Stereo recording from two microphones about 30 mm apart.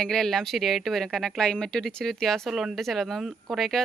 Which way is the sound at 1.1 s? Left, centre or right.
Left.